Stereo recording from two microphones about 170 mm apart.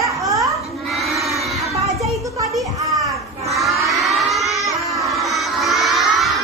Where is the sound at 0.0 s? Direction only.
20° right (ahead or behind).